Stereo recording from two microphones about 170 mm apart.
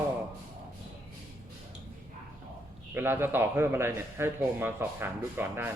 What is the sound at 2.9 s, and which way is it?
A man's voice, 10° right (ahead or behind).